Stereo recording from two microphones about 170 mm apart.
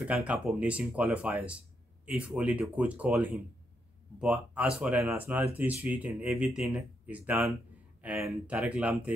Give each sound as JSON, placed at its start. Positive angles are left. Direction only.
{"t": 0.0, "sound": "speech", "side_deg": -5}
{"t": 8.5, "sound": "speech", "side_deg": -5}